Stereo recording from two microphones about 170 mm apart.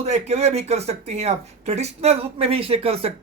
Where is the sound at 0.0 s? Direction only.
40° right (ahead or behind).